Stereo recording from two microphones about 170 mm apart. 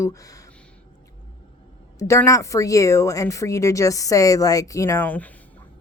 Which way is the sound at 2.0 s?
20° left (ahead or behind).